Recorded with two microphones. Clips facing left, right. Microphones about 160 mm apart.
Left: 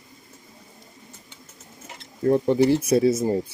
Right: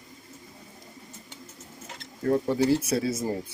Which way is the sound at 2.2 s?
20° left (ahead or behind).